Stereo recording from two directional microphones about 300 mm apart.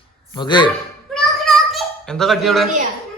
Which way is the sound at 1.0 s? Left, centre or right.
Centre.